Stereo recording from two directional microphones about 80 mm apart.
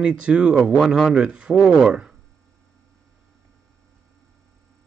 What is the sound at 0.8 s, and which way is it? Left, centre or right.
Speech, centre.